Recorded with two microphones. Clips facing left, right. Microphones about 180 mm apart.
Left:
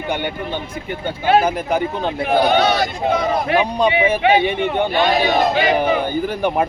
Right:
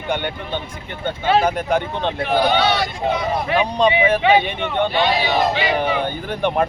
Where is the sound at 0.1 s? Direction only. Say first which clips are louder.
Right 1 dB; 10° left (ahead or behind).